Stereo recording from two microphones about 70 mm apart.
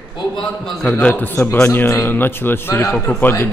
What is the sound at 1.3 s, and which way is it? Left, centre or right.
A man's voice, left.